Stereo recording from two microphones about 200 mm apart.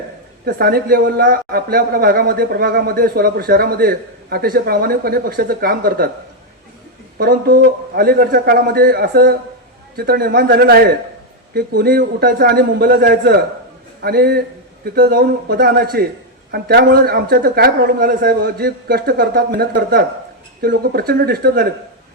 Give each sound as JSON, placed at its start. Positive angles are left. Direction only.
{"t": 0.4, "sound": "speech", "side_deg": -50}
{"t": 7.2, "sound": "speech", "side_deg": -50}